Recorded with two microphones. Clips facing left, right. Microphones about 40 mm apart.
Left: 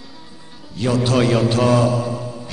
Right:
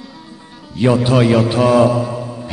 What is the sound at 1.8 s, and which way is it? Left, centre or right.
Mantra, right.